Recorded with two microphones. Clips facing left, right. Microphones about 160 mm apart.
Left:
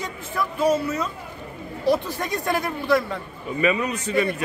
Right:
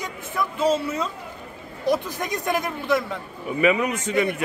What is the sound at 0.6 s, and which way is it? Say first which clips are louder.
Speech: left 1 dB; 25° right (ahead or behind).